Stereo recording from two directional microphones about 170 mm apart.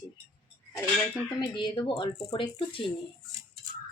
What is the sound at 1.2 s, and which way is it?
Speech, 25° left (ahead or behind).